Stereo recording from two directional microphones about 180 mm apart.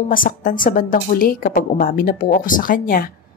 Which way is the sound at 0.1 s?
50° left (ahead or behind).